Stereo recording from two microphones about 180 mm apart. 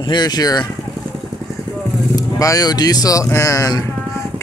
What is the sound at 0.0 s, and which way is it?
Speech, 25° left (ahead or behind).